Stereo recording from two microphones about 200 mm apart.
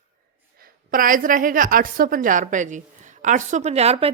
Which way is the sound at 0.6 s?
45° right (ahead or behind).